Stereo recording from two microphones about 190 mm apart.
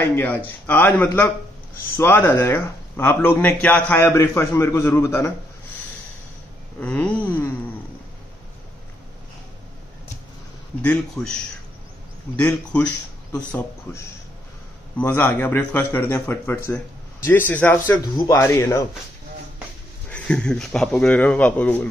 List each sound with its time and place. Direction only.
0.1 s a man's voice: 10° left (ahead or behind)
6.8 s a man's voice: 10° left (ahead or behind)
10.8 s a man's voice: 5° left (ahead or behind)
12.4 s a man's voice: 10° left (ahead or behind)
18.1 s a man's voice: 20° left (ahead or behind)
20.1 s a man's voice: 5° left (ahead or behind)